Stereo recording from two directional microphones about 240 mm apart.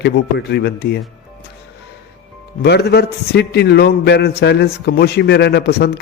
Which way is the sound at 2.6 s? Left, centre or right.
Left.